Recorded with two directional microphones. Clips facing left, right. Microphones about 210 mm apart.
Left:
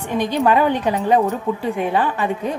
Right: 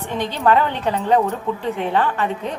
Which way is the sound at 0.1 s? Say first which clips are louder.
Left 1 dB; 10° left (ahead or behind).